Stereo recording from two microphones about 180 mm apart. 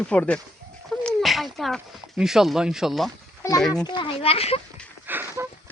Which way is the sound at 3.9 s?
30° left (ahead or behind).